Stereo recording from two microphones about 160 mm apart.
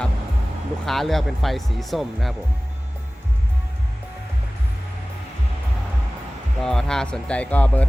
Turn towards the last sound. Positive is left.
turn(degrees=10)  # may be behind; listen again after turning